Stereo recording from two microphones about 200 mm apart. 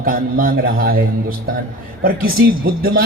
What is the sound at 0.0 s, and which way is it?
Speech, 45° right (ahead or behind).